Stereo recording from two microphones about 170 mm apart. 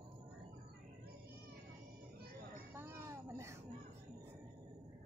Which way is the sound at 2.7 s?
15° right (ahead or behind).